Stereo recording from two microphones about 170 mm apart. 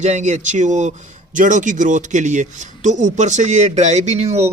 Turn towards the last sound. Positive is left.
turn(degrees=-40)  # may be behind; listen again after turning